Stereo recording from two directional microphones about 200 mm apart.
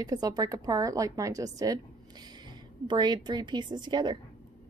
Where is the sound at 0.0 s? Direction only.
20° right (ahead or behind).